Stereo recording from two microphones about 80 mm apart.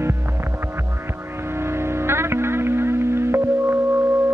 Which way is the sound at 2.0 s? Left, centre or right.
Right.